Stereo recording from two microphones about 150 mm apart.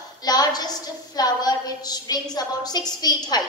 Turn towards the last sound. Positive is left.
turn(degrees=25)  # may be behind; listen again after turning